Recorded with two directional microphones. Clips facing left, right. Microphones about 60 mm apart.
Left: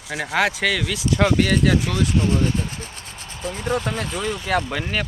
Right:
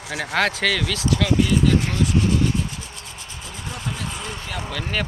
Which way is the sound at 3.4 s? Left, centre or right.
Left.